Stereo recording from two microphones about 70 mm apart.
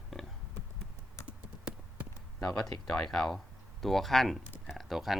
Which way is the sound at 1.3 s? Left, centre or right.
Centre.